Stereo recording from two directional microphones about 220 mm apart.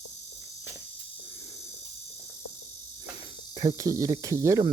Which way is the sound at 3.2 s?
25° right (ahead or behind).